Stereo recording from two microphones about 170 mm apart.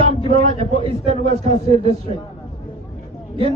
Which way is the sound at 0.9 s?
35° right (ahead or behind).